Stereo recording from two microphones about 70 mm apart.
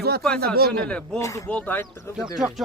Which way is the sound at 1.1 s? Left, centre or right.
Left.